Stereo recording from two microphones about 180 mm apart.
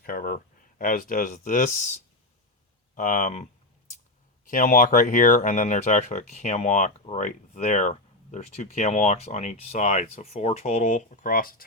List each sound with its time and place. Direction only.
0.0 s speech: 55° left (ahead or behind)
2.9 s speech: 45° left (ahead or behind)
4.4 s speech: 50° left (ahead or behind)